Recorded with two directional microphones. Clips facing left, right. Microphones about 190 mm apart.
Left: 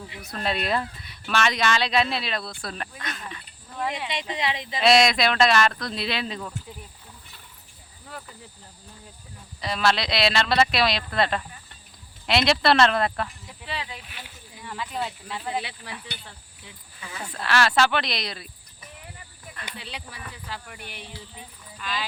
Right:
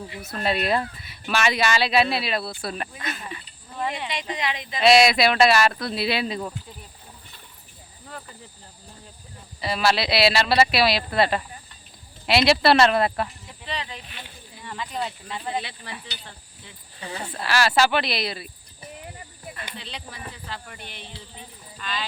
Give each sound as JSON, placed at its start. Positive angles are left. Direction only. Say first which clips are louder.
{"t": 0.3, "sound": "speech", "louder": "right 3 dB", "side_deg": -5}
{"t": 4.1, "sound": "speech", "louder": "even", "side_deg": 25}
{"t": 4.8, "sound": "speech", "louder": "right 3 dB", "side_deg": 0}
{"t": 8.0, "sound": "a sound", "louder": "right 1 dB", "side_deg": 0}
{"t": 9.6, "sound": "speech", "louder": "right 2 dB", "side_deg": -5}
{"t": 13.7, "sound": "speech", "louder": "right 2 dB", "side_deg": 5}
{"t": 17.0, "sound": "speech", "louder": "right 4 dB", "side_deg": -35}
{"t": 17.4, "sound": "speech", "louder": "right 1 dB", "side_deg": -5}
{"t": 19.7, "sound": "speech", "louder": "right 1 dB", "side_deg": 10}